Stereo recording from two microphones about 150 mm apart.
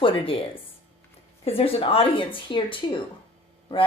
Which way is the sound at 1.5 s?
40° left (ahead or behind).